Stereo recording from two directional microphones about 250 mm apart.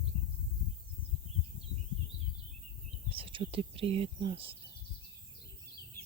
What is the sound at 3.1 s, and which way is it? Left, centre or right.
Speech, right.